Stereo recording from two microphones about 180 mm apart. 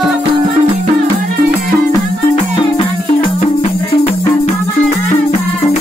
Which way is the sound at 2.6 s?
30° left (ahead or behind).